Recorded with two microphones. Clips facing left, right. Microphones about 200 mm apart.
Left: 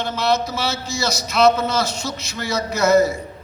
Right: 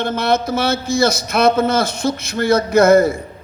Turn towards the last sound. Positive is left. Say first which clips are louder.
# right 5 dB
turn(degrees=-55)  # may be behind; listen again after turning